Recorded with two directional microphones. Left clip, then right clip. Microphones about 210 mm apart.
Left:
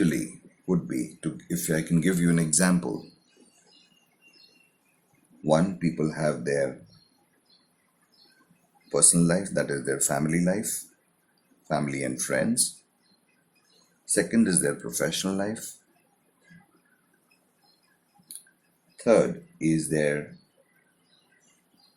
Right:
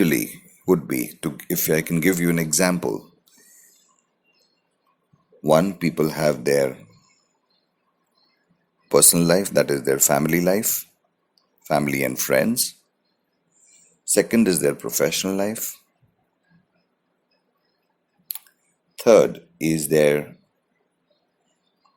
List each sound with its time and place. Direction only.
0.0 s speech: 30° right (ahead or behind)
5.5 s speech: 35° right (ahead or behind)
8.9 s speech: 35° right (ahead or behind)
11.7 s speech: 30° right (ahead or behind)
14.1 s speech: 30° right (ahead or behind)
19.0 s speech: 35° right (ahead or behind)